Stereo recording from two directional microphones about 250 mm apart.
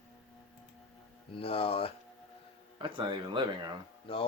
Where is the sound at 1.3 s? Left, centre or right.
Left.